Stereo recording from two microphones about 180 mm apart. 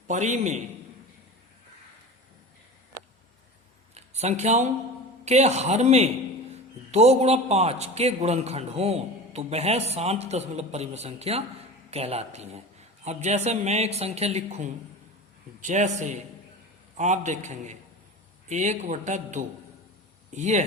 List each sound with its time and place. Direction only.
0.1 s a man's voice: 40° right (ahead or behind)
3.9 s a sound: 35° right (ahead or behind)
5.2 s a man's voice: 40° right (ahead or behind)